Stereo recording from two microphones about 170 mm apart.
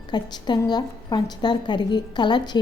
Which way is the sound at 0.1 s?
25° left (ahead or behind).